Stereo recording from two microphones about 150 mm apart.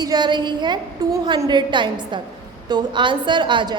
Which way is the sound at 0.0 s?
30° right (ahead or behind).